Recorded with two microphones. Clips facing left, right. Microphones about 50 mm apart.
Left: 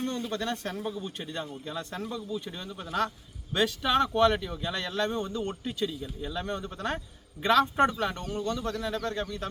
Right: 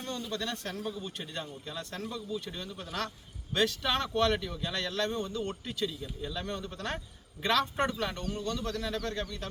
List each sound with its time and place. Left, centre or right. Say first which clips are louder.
0.0 s speech: left 4 dB; left
0.9 s speech: left 3 dB; centre